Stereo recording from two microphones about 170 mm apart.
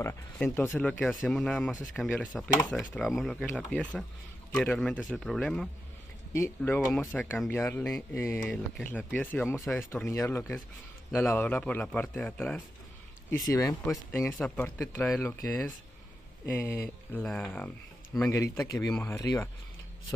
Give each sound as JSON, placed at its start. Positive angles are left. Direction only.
{"t": 0.4, "sound": "speech", "side_deg": 10}
{"t": 6.3, "sound": "speech", "side_deg": 15}
{"t": 16.4, "sound": "speech", "side_deg": 15}
{"t": 19.1, "sound": "speech", "side_deg": 20}